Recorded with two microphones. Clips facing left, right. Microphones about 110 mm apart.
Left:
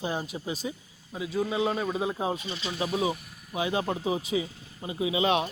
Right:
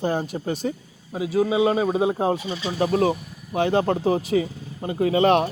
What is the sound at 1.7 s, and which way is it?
A man's voice, 50° right (ahead or behind).